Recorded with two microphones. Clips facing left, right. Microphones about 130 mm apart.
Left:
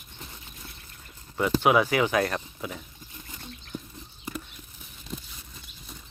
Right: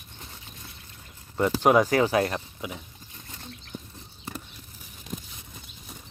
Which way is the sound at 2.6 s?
10° right (ahead or behind).